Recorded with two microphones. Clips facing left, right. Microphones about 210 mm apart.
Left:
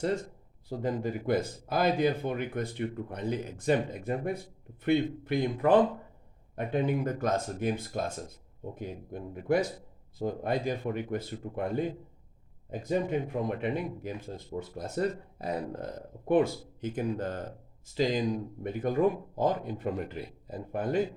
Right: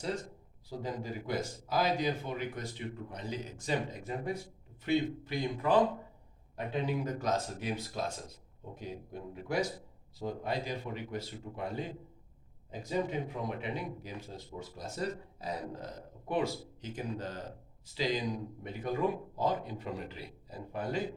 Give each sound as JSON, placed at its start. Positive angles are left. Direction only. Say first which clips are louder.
{"t": 0.7, "sound": "speech", "louder": "left 7 dB", "side_deg": 55}
{"t": 6.8, "sound": "speech", "louder": "left 2 dB", "side_deg": 55}